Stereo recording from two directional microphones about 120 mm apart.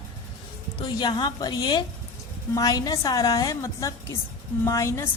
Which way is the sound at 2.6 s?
30° left (ahead or behind).